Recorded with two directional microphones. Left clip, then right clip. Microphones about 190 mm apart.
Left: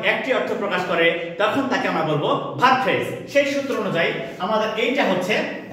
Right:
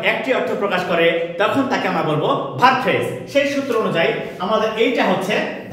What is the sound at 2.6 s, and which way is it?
Speech, 25° right (ahead or behind).